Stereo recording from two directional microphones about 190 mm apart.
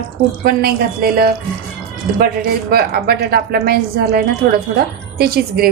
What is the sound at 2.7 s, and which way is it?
Speech, 55° right (ahead or behind).